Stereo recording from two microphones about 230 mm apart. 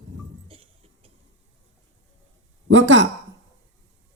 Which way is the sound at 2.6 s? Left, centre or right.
Right.